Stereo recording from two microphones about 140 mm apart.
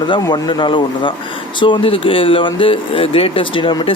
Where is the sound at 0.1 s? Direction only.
30° left (ahead or behind).